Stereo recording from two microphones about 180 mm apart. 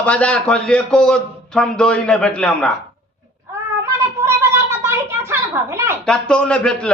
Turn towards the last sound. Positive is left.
turn(degrees=5)  # may be behind; listen again after turning